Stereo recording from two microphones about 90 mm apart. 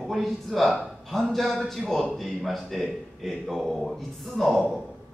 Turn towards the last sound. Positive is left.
turn(degrees=0)  # may be behind; listen again after turning